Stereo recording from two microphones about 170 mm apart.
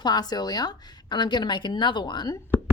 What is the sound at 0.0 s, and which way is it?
A woman's voice, 25° left (ahead or behind).